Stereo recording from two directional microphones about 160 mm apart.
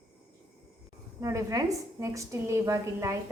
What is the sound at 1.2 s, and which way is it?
A woman's voice, 20° right (ahead or behind).